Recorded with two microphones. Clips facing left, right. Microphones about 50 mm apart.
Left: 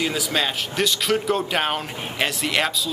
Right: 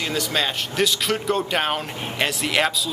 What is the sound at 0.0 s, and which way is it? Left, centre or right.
Speech, centre.